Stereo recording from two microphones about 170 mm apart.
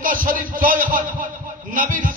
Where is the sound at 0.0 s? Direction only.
55° right (ahead or behind).